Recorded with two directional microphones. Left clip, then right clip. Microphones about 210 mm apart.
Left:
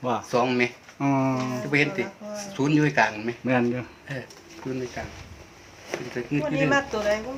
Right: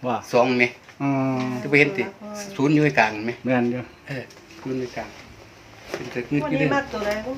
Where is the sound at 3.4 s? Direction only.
15° left (ahead or behind).